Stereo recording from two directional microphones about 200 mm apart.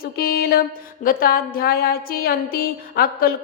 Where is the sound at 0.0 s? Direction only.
50° left (ahead or behind).